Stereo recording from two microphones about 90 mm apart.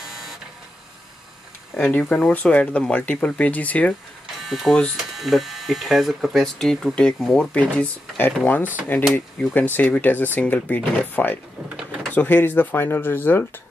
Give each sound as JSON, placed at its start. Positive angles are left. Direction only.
{"t": 1.8, "sound": "speech", "side_deg": 15}
{"t": 4.4, "sound": "speech", "side_deg": 0}
{"t": 7.5, "sound": "speech", "side_deg": 15}